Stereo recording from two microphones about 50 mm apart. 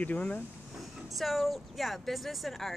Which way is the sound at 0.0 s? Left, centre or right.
Left.